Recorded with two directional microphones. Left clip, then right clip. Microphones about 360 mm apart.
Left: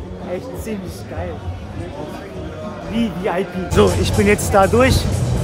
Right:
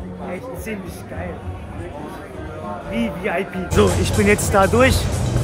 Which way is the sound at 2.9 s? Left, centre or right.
Centre.